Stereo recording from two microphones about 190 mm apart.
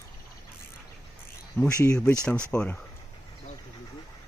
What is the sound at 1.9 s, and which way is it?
Speech, 5° left (ahead or behind).